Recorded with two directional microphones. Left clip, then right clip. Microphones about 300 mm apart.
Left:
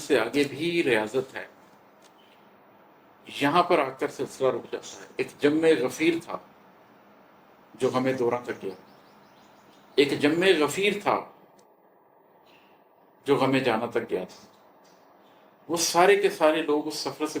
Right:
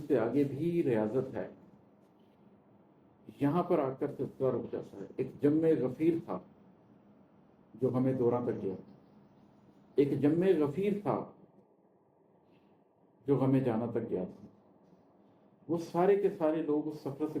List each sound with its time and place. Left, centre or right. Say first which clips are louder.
0.1 s speech: left 6 dB; centre
3.2 s speech: left 10 dB; centre
7.8 s speech: left 6 dB; centre
9.9 s speech: left 6 dB; centre
13.2 s speech: left 7 dB; centre
15.8 s speech: left 9 dB; centre